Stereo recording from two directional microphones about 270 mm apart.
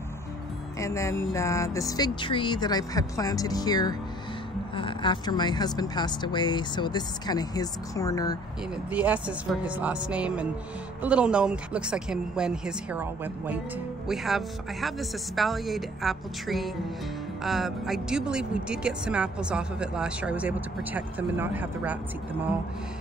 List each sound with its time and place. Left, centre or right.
0.7 s speech: centre
8.9 s speech: centre